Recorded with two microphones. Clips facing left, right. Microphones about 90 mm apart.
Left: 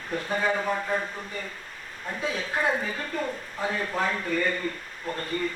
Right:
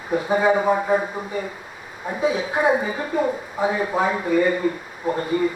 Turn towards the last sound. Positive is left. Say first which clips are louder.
# right 9 dB
turn(degrees=-10)  # may be behind; listen again after turning